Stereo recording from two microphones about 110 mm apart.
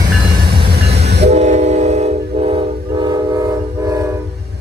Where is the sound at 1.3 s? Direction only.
90° right.